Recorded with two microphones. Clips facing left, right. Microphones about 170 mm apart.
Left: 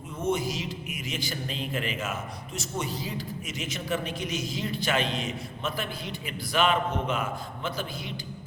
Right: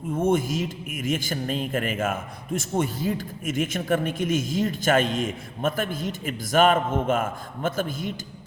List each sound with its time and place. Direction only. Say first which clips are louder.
0.1 s a man's voice: right 6 dB; 50° right (ahead or behind)